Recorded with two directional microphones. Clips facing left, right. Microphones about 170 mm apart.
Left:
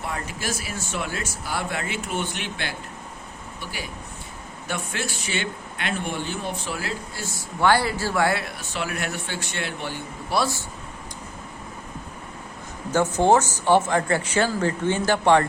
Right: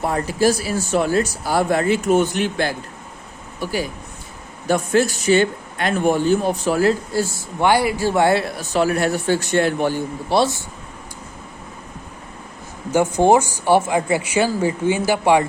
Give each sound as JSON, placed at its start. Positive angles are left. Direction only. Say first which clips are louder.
{"t": 0.0, "sound": "speech", "louder": "right 13 dB", "side_deg": -35}
{"t": 7.6, "sound": "speech", "louder": "right 4 dB", "side_deg": -15}
{"t": 10.2, "sound": "speech", "louder": "right 6 dB", "side_deg": -25}
{"t": 12.9, "sound": "speech", "louder": "right 4 dB", "side_deg": -15}